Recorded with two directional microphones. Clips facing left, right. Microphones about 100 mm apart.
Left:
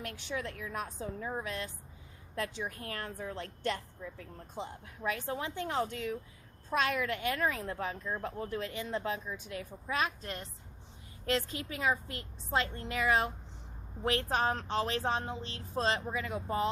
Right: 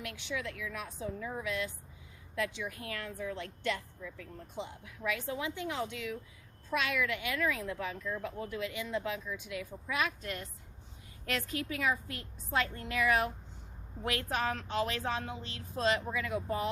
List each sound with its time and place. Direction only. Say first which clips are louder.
0.0 s a woman's voice: even; 40° left (ahead or behind)